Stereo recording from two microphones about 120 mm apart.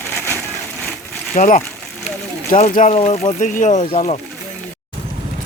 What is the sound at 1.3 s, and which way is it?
Speech, 90° left.